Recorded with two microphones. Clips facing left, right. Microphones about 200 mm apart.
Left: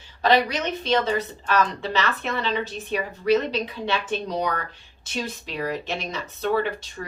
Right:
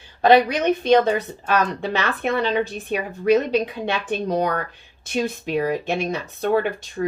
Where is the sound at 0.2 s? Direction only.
50° right (ahead or behind).